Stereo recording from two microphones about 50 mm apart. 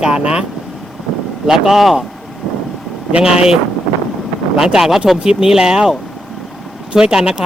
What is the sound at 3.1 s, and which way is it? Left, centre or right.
Speech, centre.